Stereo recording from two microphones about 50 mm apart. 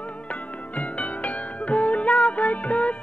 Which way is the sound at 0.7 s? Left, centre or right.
Left.